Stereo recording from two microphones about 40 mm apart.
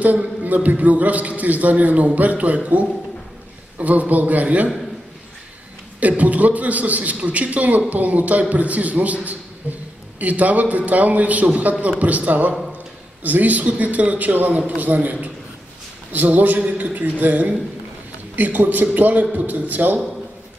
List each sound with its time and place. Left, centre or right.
0.4 s a man's voice: right
5.9 s a man's voice: right